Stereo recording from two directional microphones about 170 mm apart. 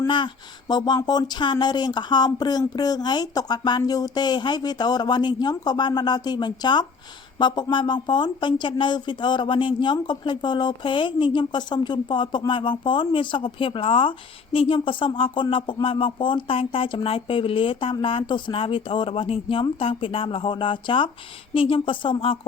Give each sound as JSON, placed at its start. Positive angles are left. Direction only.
{"t": 0.7, "sound": "speech", "side_deg": 25}